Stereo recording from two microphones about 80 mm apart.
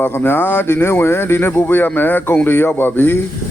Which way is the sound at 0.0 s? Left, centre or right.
Left.